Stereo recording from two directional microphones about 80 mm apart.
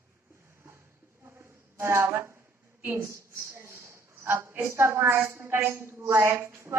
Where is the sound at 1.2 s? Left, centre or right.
Right.